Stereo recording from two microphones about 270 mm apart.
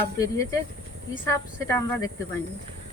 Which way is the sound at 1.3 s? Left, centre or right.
Centre.